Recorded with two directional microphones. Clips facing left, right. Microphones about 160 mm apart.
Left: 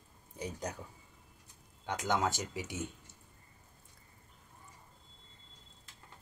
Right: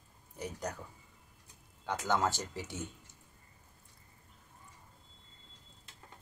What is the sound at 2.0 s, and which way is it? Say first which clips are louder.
Speech: even; 15° left (ahead or behind).